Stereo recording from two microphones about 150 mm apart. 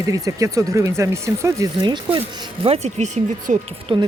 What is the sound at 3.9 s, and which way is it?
Speech, 35° right (ahead or behind).